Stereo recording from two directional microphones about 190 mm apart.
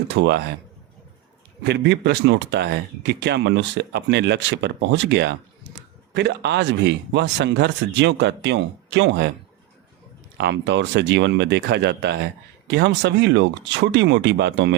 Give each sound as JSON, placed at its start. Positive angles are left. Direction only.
{"t": 0.1, "sound": "speech", "side_deg": -65}
{"t": 1.6, "sound": "speech", "side_deg": -65}
{"t": 10.3, "sound": "speech", "side_deg": -65}